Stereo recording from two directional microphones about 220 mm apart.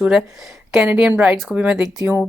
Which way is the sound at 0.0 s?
5° right (ahead or behind).